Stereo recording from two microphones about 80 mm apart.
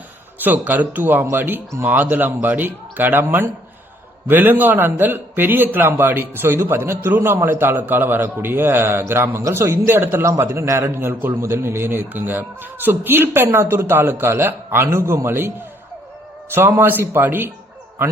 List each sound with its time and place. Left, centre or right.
0.4 s a man's voice: right